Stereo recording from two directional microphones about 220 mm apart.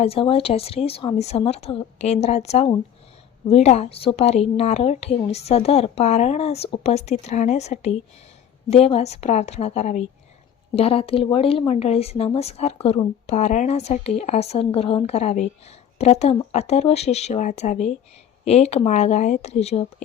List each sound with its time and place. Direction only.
0.0 s speech: 25° left (ahead or behind)